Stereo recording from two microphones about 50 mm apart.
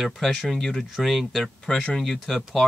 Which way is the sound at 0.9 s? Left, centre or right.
Centre.